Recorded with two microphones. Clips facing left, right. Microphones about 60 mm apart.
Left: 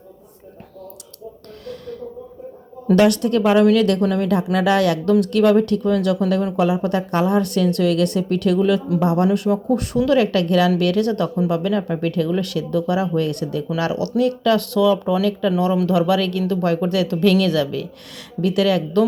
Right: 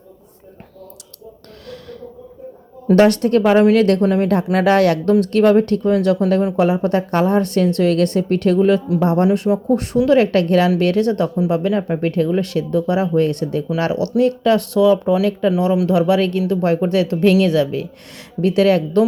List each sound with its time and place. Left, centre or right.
2.9 s a woman's voice: right
4.0 s speech: right
4.5 s a woman's voice: right
15.5 s a woman's voice: centre